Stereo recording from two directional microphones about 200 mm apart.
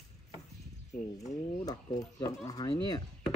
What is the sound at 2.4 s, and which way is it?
Speech, 20° left (ahead or behind).